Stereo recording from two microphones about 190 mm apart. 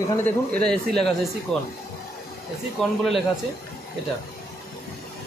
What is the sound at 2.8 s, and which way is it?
Speech, 5° left (ahead or behind).